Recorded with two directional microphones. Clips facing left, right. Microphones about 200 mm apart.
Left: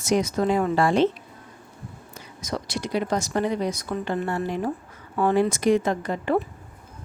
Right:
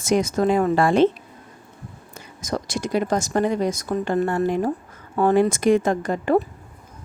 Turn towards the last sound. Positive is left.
turn(degrees=-45)  # may be behind; listen again after turning